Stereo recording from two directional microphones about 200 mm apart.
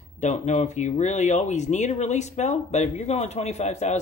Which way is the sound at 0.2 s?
35° left (ahead or behind).